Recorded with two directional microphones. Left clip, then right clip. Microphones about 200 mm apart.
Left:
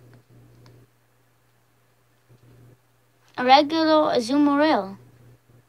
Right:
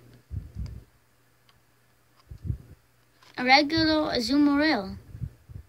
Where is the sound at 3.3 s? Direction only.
20° right (ahead or behind).